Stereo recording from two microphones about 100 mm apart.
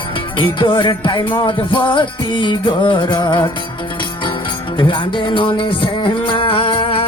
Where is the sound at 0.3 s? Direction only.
55° left (ahead or behind).